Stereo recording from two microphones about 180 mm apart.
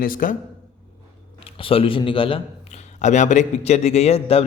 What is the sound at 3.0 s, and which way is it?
A man's voice, 40° left (ahead or behind).